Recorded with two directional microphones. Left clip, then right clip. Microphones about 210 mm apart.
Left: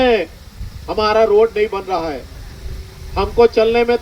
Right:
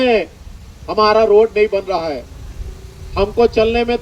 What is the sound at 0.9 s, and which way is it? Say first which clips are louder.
A man's voice: right 2 dB; 55° right (ahead or behind).